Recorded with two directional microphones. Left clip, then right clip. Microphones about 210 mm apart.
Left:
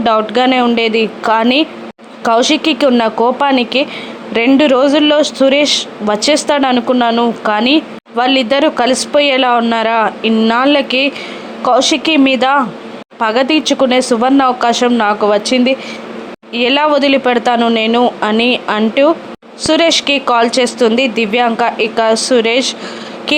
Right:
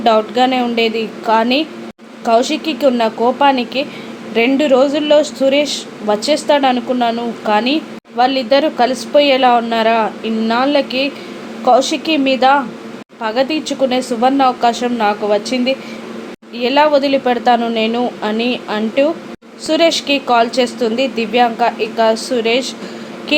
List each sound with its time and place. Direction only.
0.0 s speech: 20° left (ahead or behind)